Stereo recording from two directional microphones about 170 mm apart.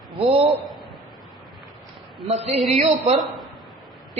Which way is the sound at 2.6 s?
40° right (ahead or behind).